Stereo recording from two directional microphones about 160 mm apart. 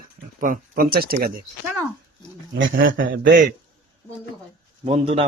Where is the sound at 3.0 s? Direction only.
60° right (ahead or behind).